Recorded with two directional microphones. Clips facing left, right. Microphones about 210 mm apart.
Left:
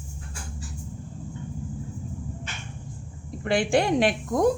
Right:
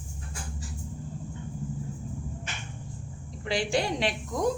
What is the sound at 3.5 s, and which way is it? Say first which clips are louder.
A woman's voice: left 6 dB; 55° left (ahead or behind).